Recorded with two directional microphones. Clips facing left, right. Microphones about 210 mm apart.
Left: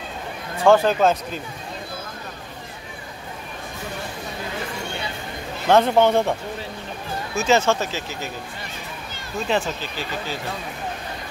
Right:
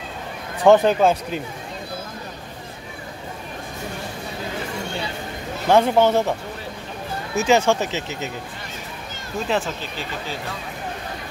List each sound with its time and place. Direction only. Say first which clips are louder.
0.7 s speech: right 2 dB; 20° right (ahead or behind)
5.7 s speech: even; 10° right (ahead or behind)
7.3 s speech: right 1 dB; 15° right (ahead or behind)
9.5 s speech: even; centre (ahead or behind)